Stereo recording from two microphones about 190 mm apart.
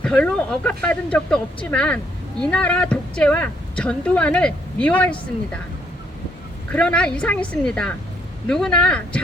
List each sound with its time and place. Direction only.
0.0 s speech: 5° left (ahead or behind)
6.7 s speech: 5° left (ahead or behind)